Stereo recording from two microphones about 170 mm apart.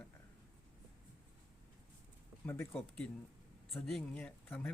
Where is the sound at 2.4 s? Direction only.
15° left (ahead or behind).